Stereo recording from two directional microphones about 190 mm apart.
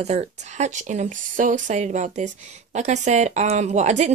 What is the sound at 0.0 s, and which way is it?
Speech, 35° right (ahead or behind).